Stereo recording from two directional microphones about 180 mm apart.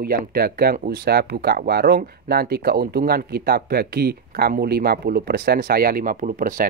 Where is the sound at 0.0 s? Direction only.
55° right (ahead or behind).